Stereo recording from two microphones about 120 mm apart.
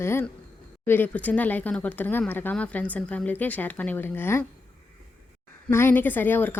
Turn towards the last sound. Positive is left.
turn(degrees=15)  # may be behind; listen again after turning